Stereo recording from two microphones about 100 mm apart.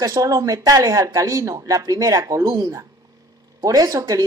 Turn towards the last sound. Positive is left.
turn(degrees=-35)  # may be behind; listen again after turning